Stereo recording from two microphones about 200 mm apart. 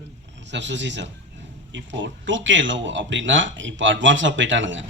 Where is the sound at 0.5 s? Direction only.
65° right (ahead or behind).